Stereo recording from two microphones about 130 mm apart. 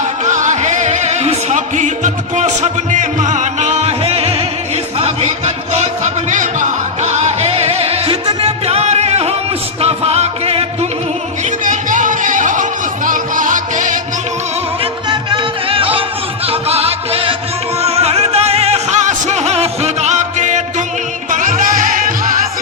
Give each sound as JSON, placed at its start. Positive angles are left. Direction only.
{"t": 0.3, "sound": "music", "side_deg": -70}
{"t": 6.3, "sound": "music", "side_deg": -75}
{"t": 11.6, "sound": "music", "side_deg": -80}
{"t": 15.1, "sound": "music", "side_deg": -40}
{"t": 21.2, "sound": "music", "side_deg": -85}